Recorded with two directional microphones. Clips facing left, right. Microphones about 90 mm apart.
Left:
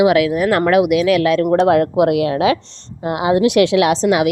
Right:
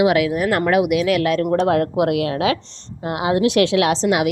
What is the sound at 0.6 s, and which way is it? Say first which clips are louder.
Speech: left 4 dB; 90° left.